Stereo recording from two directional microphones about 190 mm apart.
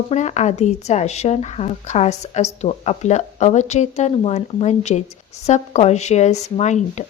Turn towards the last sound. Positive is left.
turn(degrees=35)  # may be behind; listen again after turning